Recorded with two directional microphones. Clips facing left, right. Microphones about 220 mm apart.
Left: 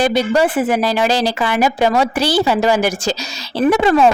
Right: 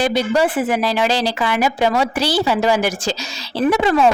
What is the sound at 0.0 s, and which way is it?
A woman's voice, 45° left (ahead or behind).